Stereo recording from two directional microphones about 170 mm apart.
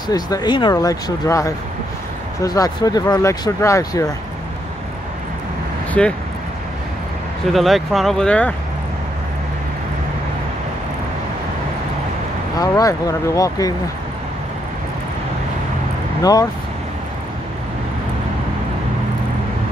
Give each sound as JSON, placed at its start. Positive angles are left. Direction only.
{"t": 0.1, "sound": "speech", "side_deg": 25}
{"t": 6.0, "sound": "speech", "side_deg": 5}
{"t": 7.5, "sound": "speech", "side_deg": 0}
{"t": 12.5, "sound": "speech", "side_deg": 20}
{"t": 16.2, "sound": "speech", "side_deg": 20}